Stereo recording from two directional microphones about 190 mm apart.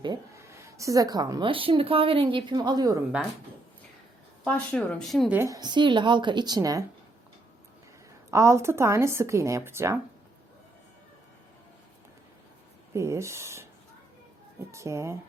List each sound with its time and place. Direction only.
0.0 s speech: 20° right (ahead or behind)
4.4 s speech: 5° left (ahead or behind)
5.3 s speech: 15° right (ahead or behind)
8.3 s a woman's voice: 15° right (ahead or behind)
12.9 s a woman's voice: 15° right (ahead or behind)
14.7 s a woman's voice: 15° right (ahead or behind)